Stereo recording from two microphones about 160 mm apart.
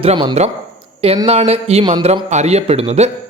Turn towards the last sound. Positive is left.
turn(degrees=-40)  # may be behind; listen again after turning